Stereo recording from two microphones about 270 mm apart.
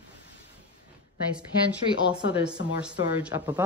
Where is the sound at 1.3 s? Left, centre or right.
Centre.